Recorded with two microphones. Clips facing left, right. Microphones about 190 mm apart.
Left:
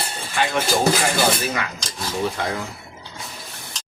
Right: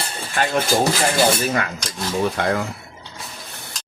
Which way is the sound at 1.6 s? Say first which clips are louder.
Right 3 dB; 50° right (ahead or behind).